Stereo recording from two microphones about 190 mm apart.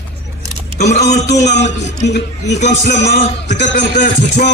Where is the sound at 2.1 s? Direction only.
65° left (ahead or behind).